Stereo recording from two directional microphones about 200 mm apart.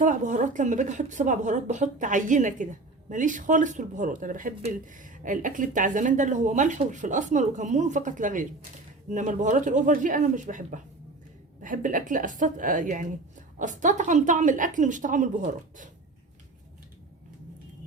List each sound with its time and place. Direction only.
0.0 s speech: 40° right (ahead or behind)